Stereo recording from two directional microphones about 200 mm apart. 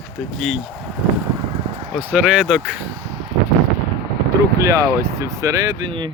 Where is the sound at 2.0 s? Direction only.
5° right (ahead or behind).